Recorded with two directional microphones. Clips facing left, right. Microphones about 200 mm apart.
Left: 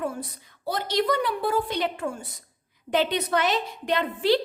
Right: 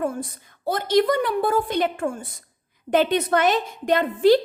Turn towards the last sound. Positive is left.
turn(degrees=-45)  # may be behind; listen again after turning